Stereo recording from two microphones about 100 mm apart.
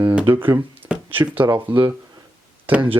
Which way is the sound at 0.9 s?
10° right (ahead or behind).